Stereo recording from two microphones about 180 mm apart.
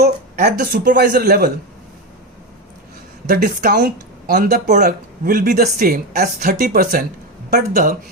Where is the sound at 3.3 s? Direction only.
55° right (ahead or behind).